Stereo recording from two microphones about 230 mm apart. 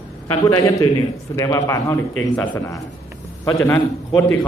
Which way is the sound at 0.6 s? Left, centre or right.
Centre.